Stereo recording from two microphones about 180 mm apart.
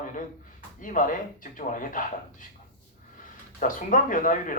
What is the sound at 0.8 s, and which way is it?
Speech, 50° left (ahead or behind).